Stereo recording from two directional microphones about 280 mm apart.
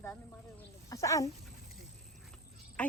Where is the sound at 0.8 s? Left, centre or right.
Centre.